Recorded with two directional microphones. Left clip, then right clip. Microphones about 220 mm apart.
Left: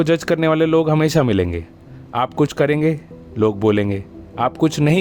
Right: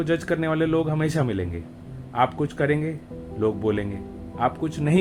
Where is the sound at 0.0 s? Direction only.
50° left (ahead or behind).